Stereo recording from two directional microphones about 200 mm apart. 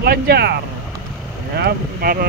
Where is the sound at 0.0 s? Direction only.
50° right (ahead or behind).